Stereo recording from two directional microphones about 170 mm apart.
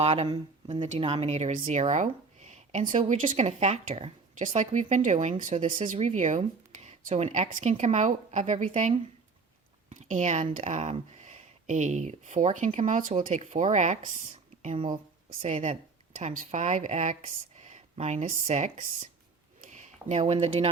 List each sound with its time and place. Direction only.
0.0 s speech: 40° right (ahead or behind)